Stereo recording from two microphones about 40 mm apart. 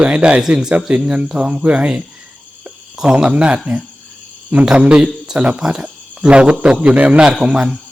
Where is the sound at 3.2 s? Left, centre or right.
Right.